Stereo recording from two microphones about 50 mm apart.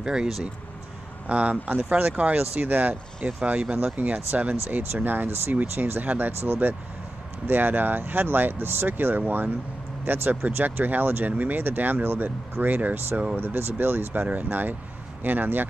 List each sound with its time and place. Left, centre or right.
0.0 s speech: centre
1.3 s speech: right
10.3 s speech: right